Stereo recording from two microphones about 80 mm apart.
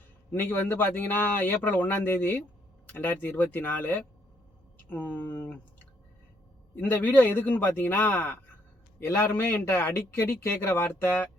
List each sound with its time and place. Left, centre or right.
0.3 s a man's voice: left
4.9 s a sound: left
6.7 s a man's voice: left